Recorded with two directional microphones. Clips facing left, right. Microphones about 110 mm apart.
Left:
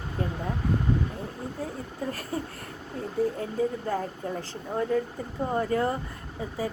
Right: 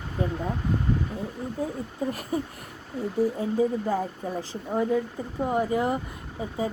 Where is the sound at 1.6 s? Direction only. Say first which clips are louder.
Right 5 dB; 15° right (ahead or behind).